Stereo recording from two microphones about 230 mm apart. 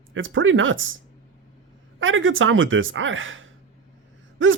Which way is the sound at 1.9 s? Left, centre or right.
Right.